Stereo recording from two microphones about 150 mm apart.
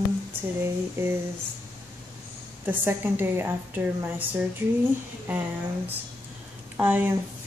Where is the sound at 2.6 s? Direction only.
15° right (ahead or behind).